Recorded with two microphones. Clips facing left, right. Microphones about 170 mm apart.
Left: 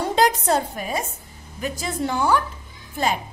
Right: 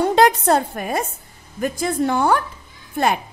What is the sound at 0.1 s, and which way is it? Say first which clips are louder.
A woman's voice: right 4 dB; 60° right (ahead or behind).